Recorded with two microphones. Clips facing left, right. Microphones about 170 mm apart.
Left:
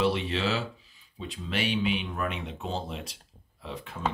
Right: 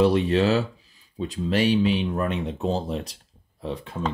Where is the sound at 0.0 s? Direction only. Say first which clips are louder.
Right 8 dB; 45° right (ahead or behind).